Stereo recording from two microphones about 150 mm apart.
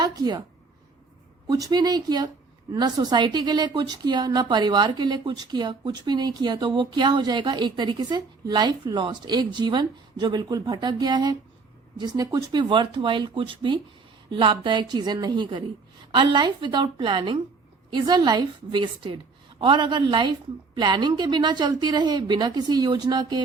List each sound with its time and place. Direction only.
0.0 s a woman's voice: 25° right (ahead or behind)
1.5 s a woman's voice: 25° right (ahead or behind)